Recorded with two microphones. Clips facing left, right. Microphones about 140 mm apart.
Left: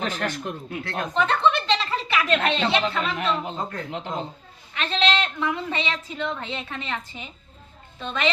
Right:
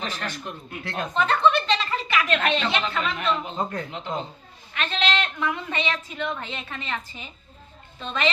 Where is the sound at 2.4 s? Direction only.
30° left (ahead or behind).